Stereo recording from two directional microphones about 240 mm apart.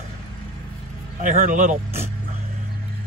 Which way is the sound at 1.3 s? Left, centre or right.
Right.